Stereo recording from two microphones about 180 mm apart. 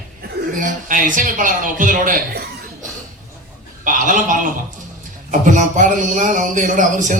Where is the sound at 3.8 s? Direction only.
45° right (ahead or behind).